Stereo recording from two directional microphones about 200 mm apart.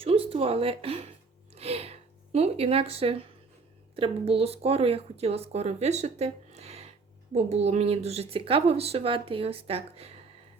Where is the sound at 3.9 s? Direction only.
25° right (ahead or behind).